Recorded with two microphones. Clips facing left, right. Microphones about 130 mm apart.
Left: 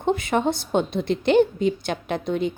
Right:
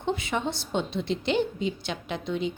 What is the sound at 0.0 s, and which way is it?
A woman's voice, 50° left (ahead or behind).